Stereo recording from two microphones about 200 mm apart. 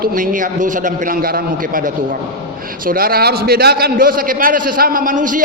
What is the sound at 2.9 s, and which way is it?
A man's voice, 45° right (ahead or behind).